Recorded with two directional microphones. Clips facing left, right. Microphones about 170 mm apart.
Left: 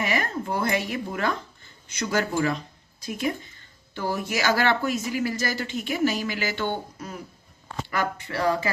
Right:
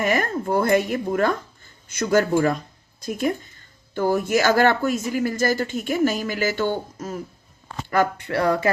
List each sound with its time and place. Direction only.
0.0 s speech: 50° right (ahead or behind)
7.9 s speech: 55° right (ahead or behind)